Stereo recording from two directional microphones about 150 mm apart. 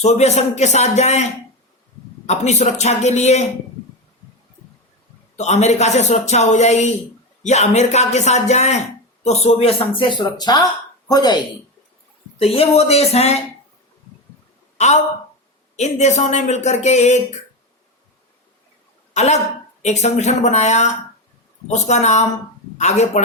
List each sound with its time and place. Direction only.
0.0 s speech: 45° left (ahead or behind)
5.4 s a woman's voice: 50° left (ahead or behind); by 11.4 s 30° left (ahead or behind)
12.4 s speech: 40° left (ahead or behind)
14.8 s speech: 50° left (ahead or behind)
19.1 s speech: 50° left (ahead or behind)